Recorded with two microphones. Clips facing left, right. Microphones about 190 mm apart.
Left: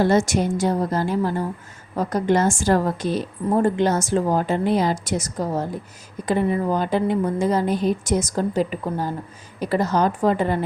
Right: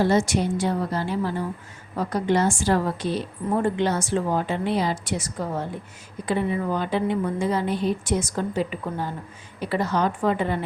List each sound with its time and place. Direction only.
0.0 s a woman's voice: 50° left (ahead or behind)